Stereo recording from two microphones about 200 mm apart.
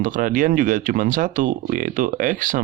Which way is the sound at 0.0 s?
40° right (ahead or behind).